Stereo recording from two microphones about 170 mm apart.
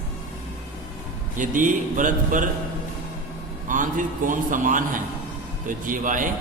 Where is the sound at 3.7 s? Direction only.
50° right (ahead or behind).